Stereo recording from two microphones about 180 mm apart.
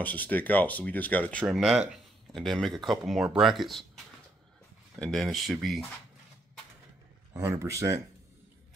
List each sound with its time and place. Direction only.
0.0 s speech: 10° left (ahead or behind)
4.9 s speech: centre (ahead or behind)
7.3 s speech: 15° right (ahead or behind)